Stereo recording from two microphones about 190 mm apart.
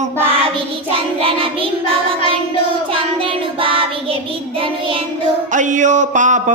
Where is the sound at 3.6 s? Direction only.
30° right (ahead or behind).